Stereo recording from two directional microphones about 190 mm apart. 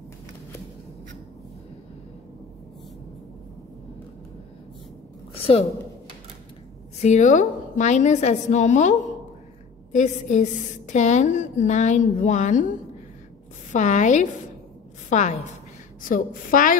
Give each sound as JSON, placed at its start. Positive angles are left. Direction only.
{"t": 5.3, "sound": "a sound", "side_deg": 30}
{"t": 7.0, "sound": "a woman's voice", "side_deg": 40}
{"t": 9.9, "sound": "a woman's voice", "side_deg": 40}